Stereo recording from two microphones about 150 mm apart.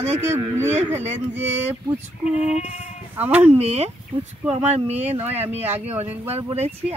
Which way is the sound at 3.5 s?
45° right (ahead or behind).